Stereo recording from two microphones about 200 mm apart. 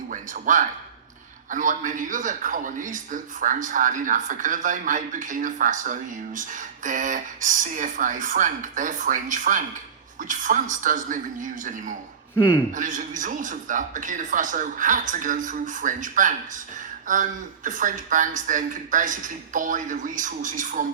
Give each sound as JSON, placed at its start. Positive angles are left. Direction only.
{"t": 0.1, "sound": "speech", "side_deg": -40}